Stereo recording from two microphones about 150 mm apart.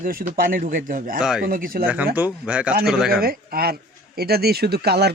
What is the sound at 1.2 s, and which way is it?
Speech, 5° right (ahead or behind).